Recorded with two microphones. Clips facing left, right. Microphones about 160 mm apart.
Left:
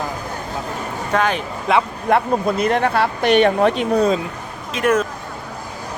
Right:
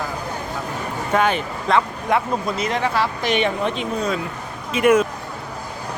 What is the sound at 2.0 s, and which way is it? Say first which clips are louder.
Speech: left 4 dB; 55° left (ahead or behind).